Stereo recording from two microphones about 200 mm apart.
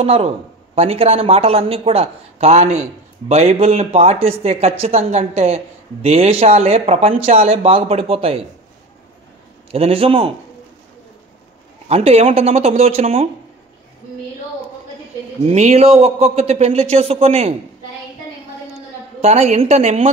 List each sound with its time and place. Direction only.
0.0 s speech: 30° right (ahead or behind)
9.7 s speech: 30° right (ahead or behind)
11.9 s speech: 30° right (ahead or behind)
15.4 s speech: 35° right (ahead or behind)
19.2 s speech: 30° right (ahead or behind)